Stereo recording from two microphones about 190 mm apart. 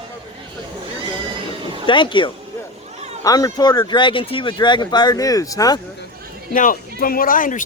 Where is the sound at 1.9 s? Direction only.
25° left (ahead or behind).